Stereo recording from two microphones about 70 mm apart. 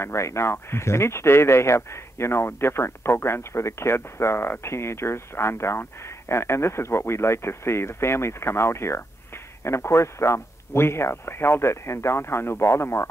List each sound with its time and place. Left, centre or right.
0.0 s speech: left